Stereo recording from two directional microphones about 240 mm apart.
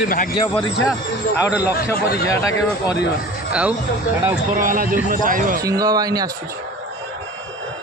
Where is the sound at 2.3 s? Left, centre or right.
Centre.